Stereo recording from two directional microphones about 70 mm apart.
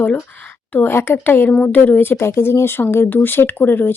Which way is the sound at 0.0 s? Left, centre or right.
Left.